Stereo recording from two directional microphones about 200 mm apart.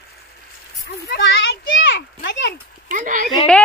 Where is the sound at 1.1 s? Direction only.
65° left (ahead or behind).